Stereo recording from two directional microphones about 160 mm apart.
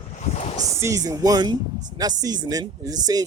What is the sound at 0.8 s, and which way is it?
Speech, 20° right (ahead or behind).